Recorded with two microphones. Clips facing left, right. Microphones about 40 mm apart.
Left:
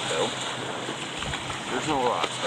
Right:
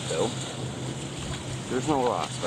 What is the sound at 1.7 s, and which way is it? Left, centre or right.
Speech, left.